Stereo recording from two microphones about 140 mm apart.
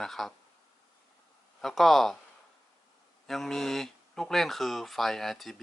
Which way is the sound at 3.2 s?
Centre (ahead or behind).